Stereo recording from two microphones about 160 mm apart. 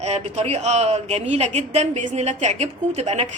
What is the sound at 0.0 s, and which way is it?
A woman's voice, 45° right (ahead or behind).